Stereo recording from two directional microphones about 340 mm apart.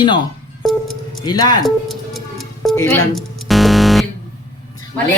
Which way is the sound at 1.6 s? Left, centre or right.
Centre.